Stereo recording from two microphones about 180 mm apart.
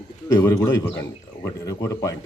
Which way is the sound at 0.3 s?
15° left (ahead or behind).